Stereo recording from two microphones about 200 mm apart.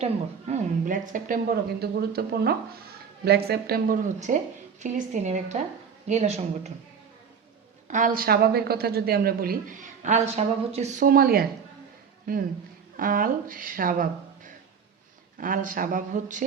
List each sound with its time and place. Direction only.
0.0 s speech: 35° right (ahead or behind)
7.9 s a woman's voice: 40° right (ahead or behind)